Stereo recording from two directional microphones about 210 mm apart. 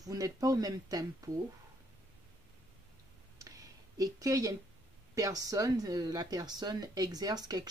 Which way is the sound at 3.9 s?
15° right (ahead or behind).